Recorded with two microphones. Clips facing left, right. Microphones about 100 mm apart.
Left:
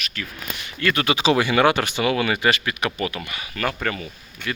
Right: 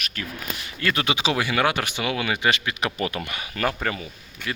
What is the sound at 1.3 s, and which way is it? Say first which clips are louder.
Speech: left 5 dB; centre (ahead or behind).